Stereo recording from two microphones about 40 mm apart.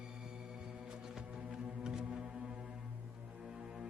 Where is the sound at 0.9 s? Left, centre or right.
Centre.